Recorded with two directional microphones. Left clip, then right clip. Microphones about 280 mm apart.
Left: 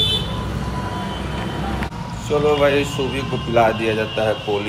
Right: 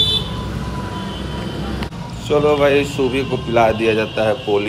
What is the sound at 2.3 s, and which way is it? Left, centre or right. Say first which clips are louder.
Speech: right 3 dB; right.